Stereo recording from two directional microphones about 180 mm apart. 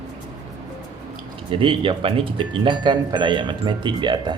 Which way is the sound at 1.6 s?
30° right (ahead or behind).